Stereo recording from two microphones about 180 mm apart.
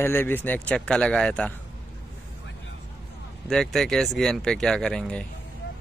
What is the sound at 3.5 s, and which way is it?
Speech, centre (ahead or behind).